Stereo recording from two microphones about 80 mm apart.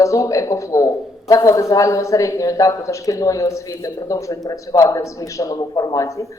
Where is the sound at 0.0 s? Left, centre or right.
Left.